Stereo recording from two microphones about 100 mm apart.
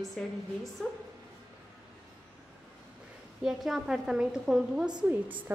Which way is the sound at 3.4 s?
5° right (ahead or behind).